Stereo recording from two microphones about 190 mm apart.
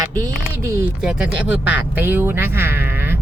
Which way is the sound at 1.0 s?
5° right (ahead or behind).